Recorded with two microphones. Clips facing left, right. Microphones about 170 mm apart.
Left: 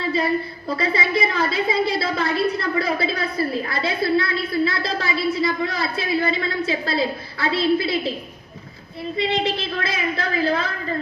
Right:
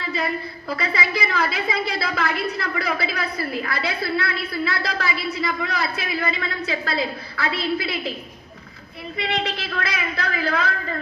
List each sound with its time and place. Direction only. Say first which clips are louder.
0.0 s a sound: left 4 dB; 30° left (ahead or behind)
0.8 s a woman's voice: left 4 dB; 25° left (ahead or behind)
9.1 s a woman's voice: left 4 dB; 25° left (ahead or behind)